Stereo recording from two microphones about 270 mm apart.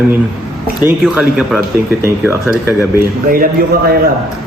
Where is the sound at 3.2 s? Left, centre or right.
Right.